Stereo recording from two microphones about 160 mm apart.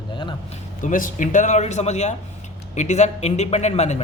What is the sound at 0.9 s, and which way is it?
A man's voice, 55° left (ahead or behind).